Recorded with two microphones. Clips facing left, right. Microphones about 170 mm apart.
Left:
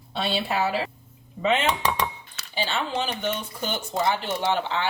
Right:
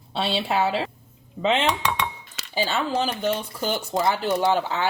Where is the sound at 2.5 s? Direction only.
40° right (ahead or behind).